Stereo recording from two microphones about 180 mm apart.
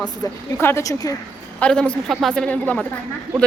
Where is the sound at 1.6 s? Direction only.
5° left (ahead or behind).